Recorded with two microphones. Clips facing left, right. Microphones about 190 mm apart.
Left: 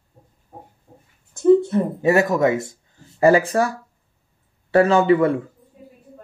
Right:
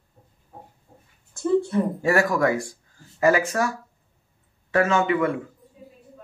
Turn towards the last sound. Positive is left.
turn(degrees=35)  # may be behind; listen again after turning